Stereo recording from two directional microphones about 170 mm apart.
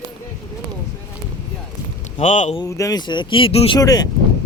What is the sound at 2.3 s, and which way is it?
Speech, 45° left (ahead or behind).